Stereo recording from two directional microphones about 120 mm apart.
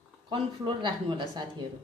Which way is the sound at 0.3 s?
40° right (ahead or behind).